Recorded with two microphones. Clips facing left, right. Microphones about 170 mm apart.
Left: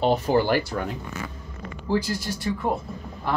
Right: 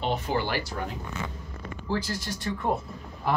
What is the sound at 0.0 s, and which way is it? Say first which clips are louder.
Speech: left 7 dB; 40° left (ahead or behind).